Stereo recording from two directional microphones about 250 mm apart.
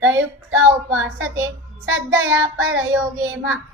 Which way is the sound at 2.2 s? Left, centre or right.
Right.